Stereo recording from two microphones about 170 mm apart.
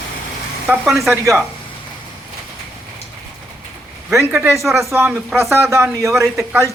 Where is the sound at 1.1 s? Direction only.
10° right (ahead or behind).